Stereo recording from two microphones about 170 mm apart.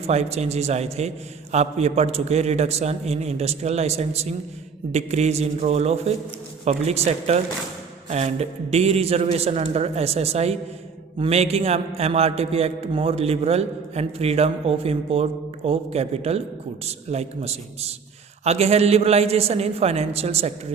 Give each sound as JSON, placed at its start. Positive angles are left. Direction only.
{"t": 0.0, "sound": "a man's voice", "side_deg": -40}